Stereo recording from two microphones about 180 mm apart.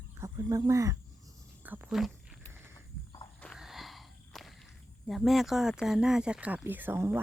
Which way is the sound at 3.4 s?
Centre (ahead or behind).